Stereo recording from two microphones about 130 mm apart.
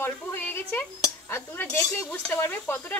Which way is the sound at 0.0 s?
15° left (ahead or behind).